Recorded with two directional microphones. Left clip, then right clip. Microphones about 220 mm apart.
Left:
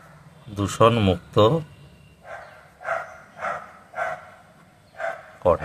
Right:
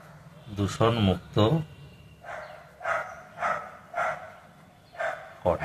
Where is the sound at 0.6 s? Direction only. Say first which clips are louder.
Left 7 dB; 50° left (ahead or behind).